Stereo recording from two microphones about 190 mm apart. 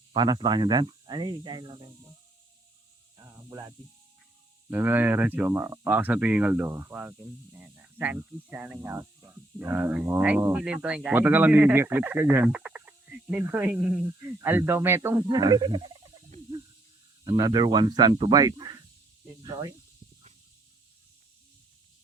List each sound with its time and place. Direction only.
0.1 s speech: 25° right (ahead or behind)
4.7 s speech: 10° right (ahead or behind)
17.2 s speech: 20° right (ahead or behind)